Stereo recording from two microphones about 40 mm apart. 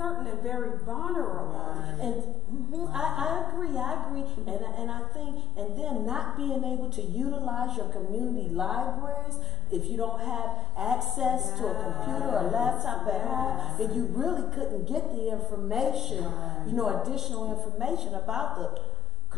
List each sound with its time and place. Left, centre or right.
0.4 s a man's voice: centre